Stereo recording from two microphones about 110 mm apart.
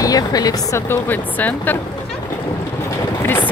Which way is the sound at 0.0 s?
35° left (ahead or behind).